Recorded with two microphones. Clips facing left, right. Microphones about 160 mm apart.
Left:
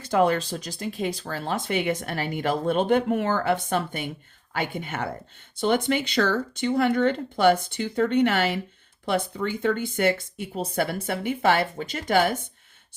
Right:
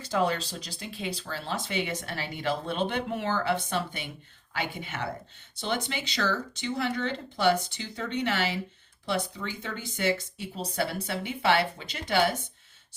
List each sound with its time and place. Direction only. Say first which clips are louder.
0.0 s speech: left 6 dB; 55° left (ahead or behind)